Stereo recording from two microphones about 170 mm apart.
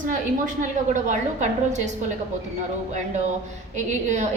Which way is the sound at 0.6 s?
45° right (ahead or behind).